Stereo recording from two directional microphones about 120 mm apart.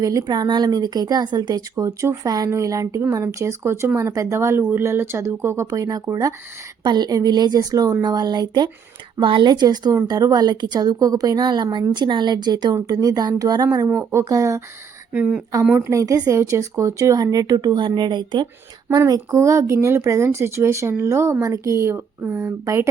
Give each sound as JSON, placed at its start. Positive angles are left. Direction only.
{"t": 0.0, "sound": "a woman's voice", "side_deg": -30}
{"t": 14.0, "sound": "speech", "side_deg": -20}
{"t": 15.1, "sound": "speech", "side_deg": -10}
{"t": 15.8, "sound": "speech", "side_deg": -25}